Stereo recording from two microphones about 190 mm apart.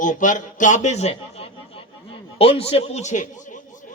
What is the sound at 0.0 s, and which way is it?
A man's voice, 40° left (ahead or behind).